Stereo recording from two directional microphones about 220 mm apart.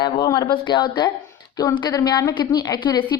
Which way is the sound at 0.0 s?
15° left (ahead or behind).